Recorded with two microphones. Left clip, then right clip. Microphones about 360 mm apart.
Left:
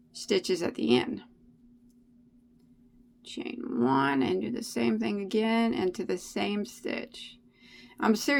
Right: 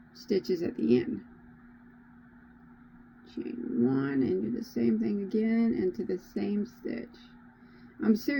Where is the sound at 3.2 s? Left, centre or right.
Centre.